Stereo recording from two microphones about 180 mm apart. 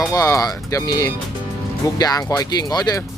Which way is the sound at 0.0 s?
20° left (ahead or behind).